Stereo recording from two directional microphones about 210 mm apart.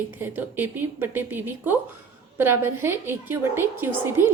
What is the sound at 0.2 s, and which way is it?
A woman's voice, 10° right (ahead or behind).